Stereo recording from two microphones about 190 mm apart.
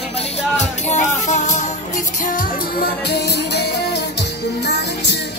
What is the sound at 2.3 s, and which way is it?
Music, 55° left (ahead or behind).